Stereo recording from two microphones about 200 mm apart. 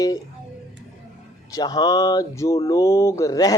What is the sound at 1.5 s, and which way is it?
Speech, 20° left (ahead or behind).